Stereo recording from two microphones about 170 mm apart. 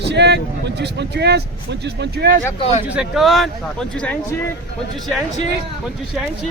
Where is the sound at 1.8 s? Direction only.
75° right (ahead or behind).